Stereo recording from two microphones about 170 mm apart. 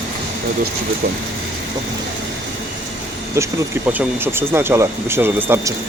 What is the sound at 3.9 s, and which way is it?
Speech, 10° right (ahead or behind).